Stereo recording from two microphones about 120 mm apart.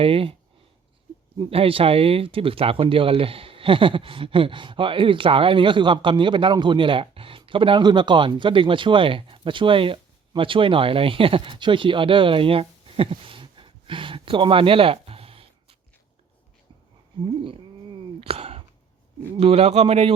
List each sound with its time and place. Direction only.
0.0 s speech: 50° right (ahead or behind)
1.5 s speech: 50° right (ahead or behind)
18.2 s a sound: 55° right (ahead or behind)
19.4 s speech: 55° right (ahead or behind)